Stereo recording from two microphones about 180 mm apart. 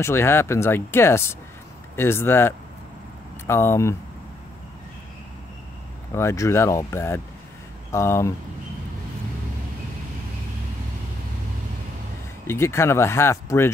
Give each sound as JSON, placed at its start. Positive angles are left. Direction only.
{"t": 0.0, "sound": "speech", "side_deg": 15}
{"t": 6.1, "sound": "speech", "side_deg": 15}
{"t": 12.4, "sound": "speech", "side_deg": 15}